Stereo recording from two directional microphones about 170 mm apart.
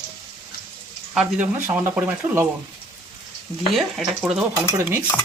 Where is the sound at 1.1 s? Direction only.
10° right (ahead or behind).